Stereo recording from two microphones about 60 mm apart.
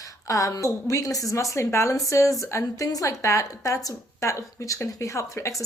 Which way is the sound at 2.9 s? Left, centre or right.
Left.